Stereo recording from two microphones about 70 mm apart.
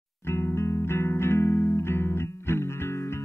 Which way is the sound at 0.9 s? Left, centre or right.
Left.